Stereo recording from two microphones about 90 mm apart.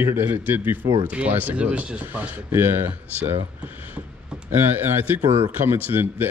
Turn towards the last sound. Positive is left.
turn(degrees=-25)  # may be behind; listen again after turning